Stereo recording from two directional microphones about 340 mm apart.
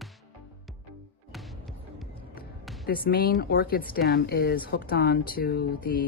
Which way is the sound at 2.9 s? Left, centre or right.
Left.